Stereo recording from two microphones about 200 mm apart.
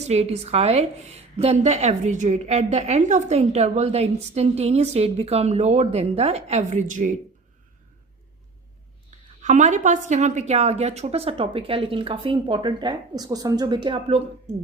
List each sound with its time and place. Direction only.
0.0 s a woman's voice: 30° right (ahead or behind)
9.4 s a woman's voice: 35° right (ahead or behind)